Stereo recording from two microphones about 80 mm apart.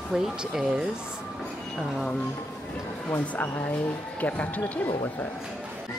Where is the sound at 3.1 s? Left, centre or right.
Left.